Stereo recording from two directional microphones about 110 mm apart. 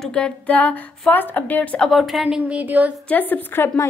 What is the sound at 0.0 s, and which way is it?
A woman's voice, 10° left (ahead or behind).